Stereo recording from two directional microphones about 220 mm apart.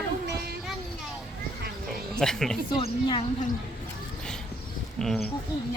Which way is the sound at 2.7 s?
25° left (ahead or behind).